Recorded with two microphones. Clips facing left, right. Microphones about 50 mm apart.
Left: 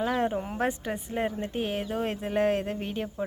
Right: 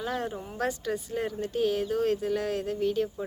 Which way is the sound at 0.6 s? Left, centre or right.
Left.